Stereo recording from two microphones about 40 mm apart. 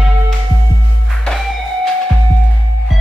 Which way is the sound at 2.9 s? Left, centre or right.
Centre.